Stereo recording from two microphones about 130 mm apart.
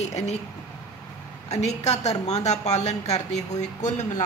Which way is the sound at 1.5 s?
60° left (ahead or behind).